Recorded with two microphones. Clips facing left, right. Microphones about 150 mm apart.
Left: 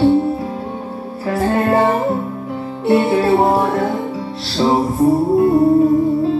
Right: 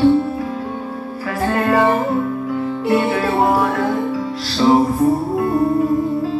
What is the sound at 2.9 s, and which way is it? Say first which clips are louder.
Music: left 5 dB; 25° left (ahead or behind).